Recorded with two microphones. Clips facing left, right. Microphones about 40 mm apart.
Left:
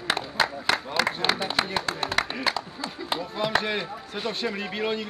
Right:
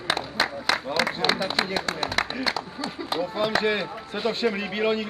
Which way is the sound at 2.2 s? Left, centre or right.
Centre.